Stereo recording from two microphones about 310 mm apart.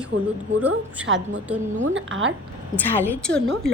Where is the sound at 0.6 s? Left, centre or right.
Centre.